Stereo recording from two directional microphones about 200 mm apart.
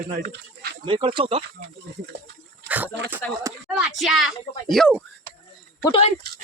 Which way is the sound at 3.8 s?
Centre (ahead or behind).